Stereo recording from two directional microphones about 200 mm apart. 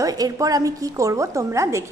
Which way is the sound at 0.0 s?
15° right (ahead or behind).